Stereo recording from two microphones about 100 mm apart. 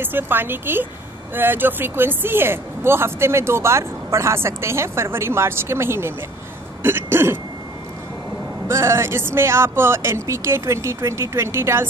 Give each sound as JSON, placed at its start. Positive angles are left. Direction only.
{"t": 0.0, "sound": "speech", "side_deg": -20}
{"t": 6.8, "sound": "throat clearing", "side_deg": -20}
{"t": 8.6, "sound": "speech", "side_deg": -25}